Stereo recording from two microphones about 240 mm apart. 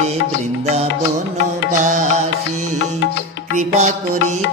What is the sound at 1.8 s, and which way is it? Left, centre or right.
Music, right.